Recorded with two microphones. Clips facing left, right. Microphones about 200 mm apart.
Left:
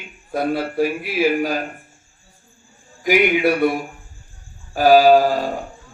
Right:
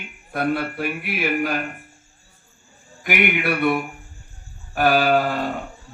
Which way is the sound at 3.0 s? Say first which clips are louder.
Left 6 dB; 60° right (ahead or behind).